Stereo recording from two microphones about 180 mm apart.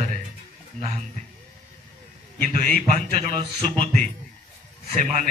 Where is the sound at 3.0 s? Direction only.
55° left (ahead or behind).